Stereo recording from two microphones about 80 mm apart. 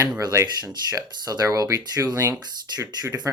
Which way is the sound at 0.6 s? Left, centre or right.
Right.